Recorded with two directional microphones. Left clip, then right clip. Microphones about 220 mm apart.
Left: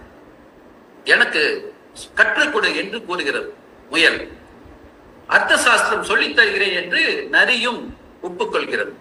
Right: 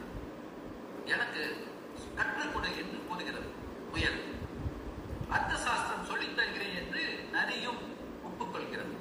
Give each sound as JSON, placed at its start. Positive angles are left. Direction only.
{"t": 1.0, "sound": "a man's voice", "side_deg": 45}
{"t": 5.3, "sound": "a man's voice", "side_deg": 45}